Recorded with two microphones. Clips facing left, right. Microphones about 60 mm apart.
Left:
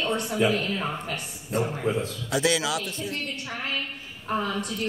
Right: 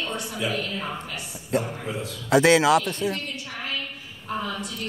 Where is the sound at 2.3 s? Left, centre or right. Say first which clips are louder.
Right 9 dB; right.